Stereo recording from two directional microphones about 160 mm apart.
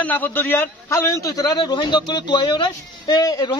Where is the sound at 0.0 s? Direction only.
10° left (ahead or behind).